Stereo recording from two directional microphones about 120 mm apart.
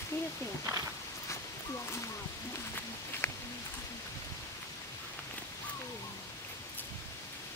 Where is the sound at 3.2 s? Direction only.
20° left (ahead or behind).